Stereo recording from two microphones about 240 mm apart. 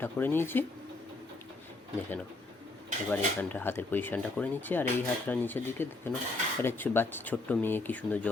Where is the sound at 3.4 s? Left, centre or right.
Centre.